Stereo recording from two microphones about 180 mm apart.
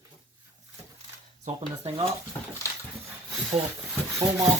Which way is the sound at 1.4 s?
35° right (ahead or behind).